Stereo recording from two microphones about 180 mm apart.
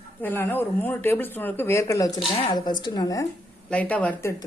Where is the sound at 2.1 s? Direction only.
30° left (ahead or behind).